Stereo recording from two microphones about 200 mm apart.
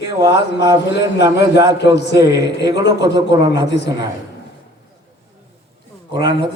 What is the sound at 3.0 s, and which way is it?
Speech, 20° right (ahead or behind).